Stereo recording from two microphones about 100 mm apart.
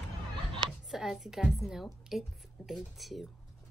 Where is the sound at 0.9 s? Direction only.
5° right (ahead or behind).